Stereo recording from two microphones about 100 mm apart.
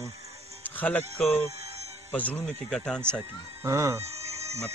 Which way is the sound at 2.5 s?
5° left (ahead or behind).